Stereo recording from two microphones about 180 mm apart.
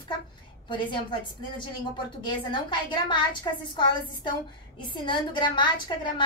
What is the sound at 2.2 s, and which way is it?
A woman's voice, 25° left (ahead or behind).